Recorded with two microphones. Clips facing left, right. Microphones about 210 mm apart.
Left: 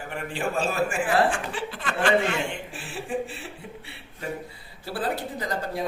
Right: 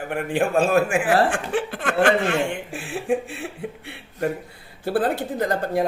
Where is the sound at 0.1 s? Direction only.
55° right (ahead or behind).